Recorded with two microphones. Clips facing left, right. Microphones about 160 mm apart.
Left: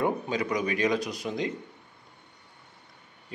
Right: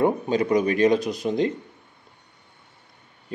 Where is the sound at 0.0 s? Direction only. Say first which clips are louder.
Right 6 dB; 25° right (ahead or behind).